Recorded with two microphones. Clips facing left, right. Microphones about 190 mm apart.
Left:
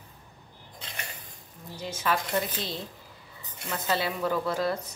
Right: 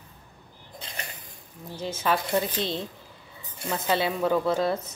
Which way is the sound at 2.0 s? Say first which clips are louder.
Right 3 dB; 25° right (ahead or behind).